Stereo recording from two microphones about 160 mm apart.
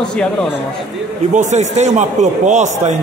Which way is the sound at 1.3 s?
50° right (ahead or behind).